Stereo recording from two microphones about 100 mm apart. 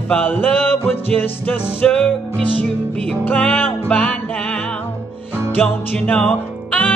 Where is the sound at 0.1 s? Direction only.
20° left (ahead or behind).